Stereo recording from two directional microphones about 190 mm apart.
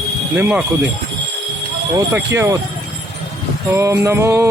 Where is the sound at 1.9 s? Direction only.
15° right (ahead or behind).